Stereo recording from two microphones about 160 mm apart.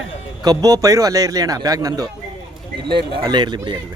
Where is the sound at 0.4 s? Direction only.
25° right (ahead or behind).